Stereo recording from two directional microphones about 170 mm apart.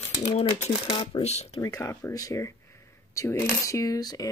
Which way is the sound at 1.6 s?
20° left (ahead or behind).